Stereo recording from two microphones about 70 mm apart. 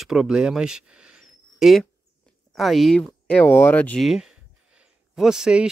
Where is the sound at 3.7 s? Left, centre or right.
Left.